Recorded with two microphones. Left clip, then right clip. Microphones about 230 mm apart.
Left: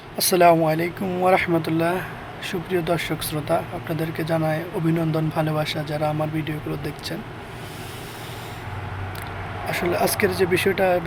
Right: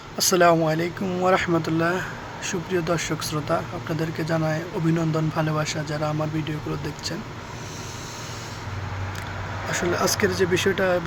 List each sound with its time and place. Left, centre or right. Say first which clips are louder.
0.2 s speech: left 2 dB; centre
9.6 s speech: left 1 dB; centre